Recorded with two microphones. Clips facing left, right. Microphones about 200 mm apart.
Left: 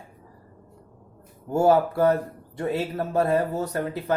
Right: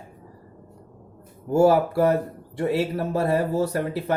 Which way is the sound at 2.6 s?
30° right (ahead or behind).